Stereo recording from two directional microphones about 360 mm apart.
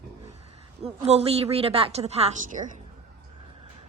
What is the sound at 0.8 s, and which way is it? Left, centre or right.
A woman's voice, centre.